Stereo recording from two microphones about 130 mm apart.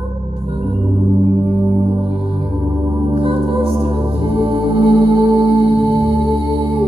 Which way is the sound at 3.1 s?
45° right (ahead or behind).